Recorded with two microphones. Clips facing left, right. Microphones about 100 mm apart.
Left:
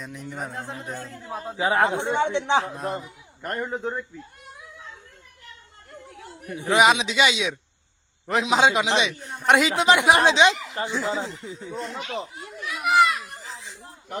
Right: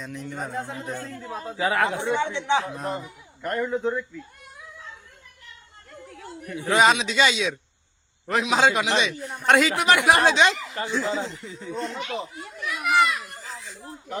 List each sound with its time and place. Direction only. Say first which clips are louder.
0.0 s a man's voice: right 1 dB; 10° left (ahead or behind); by 2.6 s 30° left (ahead or behind)
2.7 s a man's voice: even; 5° left (ahead or behind)
3.5 s speech: right 3 dB; 30° left (ahead or behind)
6.4 s a man's voice: left 1 dB; 20° left (ahead or behind)
11.2 s a man's voice: even; 30° left (ahead or behind)
11.7 s a man's voice: right 3 dB; 5° left (ahead or behind)
12.0 s children playing: even; centre (ahead or behind)
13.1 s children playing: left 1 dB; 20° left (ahead or behind)